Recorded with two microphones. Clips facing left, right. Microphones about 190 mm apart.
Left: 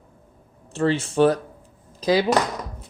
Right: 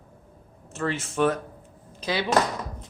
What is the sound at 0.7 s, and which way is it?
A man's voice, 30° left (ahead or behind).